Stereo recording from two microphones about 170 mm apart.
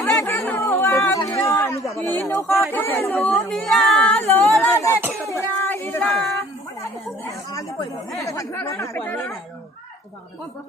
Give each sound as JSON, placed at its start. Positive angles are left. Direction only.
{"t": 0.0, "sound": "a sound", "side_deg": 15}
{"t": 2.7, "sound": "speech", "side_deg": 10}
{"t": 5.3, "sound": "a sound", "side_deg": 15}
{"t": 7.3, "sound": "chatter", "side_deg": 20}
{"t": 8.2, "sound": "speech", "side_deg": 20}
{"t": 9.0, "sound": "speech", "side_deg": 5}